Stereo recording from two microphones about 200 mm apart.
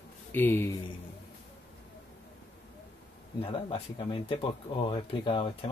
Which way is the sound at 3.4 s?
25° left (ahead or behind).